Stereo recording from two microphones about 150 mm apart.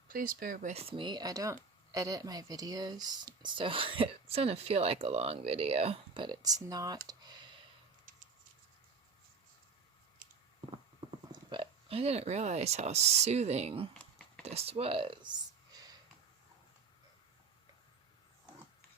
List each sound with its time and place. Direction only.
0.1 s speech: 70° right (ahead or behind)
0.7 s speech: 40° right (ahead or behind); by 7.0 s 25° right (ahead or behind)
7.1 s clicking: 30° right (ahead or behind)
11.3 s speech: 30° right (ahead or behind)